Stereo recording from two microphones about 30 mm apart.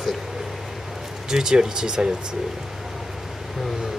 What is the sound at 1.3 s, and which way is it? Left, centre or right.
Speech, right.